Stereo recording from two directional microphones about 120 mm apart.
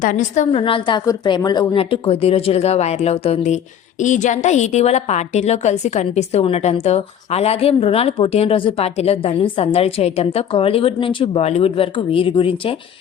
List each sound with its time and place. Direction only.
0.0 s a woman's voice: 90° left
0.5 s speech: 45° left (ahead or behind)
1.0 s a woman's voice: 30° left (ahead or behind)
1.7 s speech: 50° left (ahead or behind)